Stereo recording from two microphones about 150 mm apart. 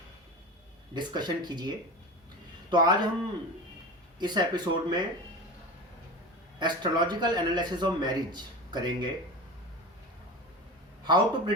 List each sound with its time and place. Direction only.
0.9 s a man's voice: 30° right (ahead or behind)
4.2 s a man's voice: 30° right (ahead or behind)
6.6 s a man's voice: 30° right (ahead or behind)
11.0 s a man's voice: 30° right (ahead or behind)